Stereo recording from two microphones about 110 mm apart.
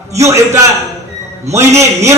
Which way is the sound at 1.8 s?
25° right (ahead or behind).